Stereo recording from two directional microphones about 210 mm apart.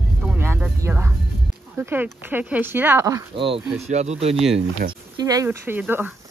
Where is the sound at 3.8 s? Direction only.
30° right (ahead or behind).